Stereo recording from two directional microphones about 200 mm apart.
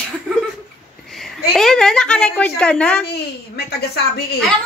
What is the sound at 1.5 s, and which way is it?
Speech, centre (ahead or behind).